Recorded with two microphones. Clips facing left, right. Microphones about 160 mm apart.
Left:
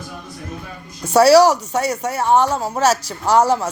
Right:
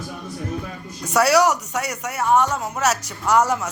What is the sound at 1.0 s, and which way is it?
Speech, 30° left (ahead or behind).